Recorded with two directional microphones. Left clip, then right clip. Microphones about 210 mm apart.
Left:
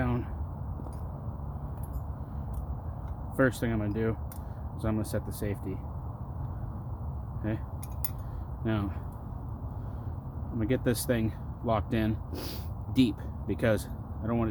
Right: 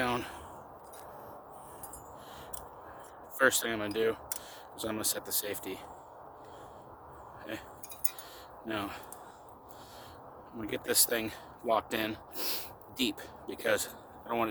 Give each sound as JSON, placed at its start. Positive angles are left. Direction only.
{"t": 0.0, "sound": "a sound", "side_deg": -40}
{"t": 3.3, "sound": "speech", "side_deg": -35}
{"t": 8.7, "sound": "speech", "side_deg": -30}
{"t": 10.8, "sound": "speech", "side_deg": -30}